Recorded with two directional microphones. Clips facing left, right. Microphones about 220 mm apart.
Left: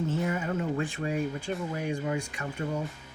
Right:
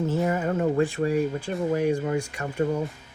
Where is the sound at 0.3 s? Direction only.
45° right (ahead or behind).